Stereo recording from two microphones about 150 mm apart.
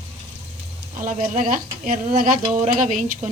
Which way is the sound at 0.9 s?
60° right (ahead or behind).